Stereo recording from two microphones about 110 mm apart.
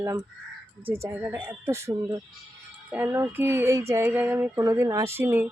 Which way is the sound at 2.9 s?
20° right (ahead or behind).